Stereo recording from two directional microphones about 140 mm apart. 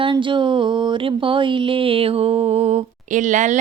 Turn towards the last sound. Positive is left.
turn(degrees=-60)  # may be behind; listen again after turning